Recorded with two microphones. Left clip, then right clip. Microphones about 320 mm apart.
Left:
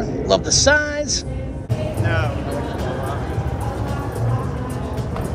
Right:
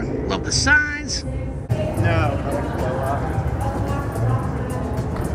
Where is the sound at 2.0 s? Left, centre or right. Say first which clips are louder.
Right 1 dB; right.